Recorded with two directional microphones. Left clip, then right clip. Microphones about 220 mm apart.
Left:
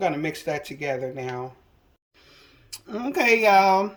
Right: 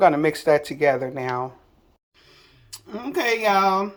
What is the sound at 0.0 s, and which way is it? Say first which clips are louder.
Speech: right 8 dB; 45° right (ahead or behind).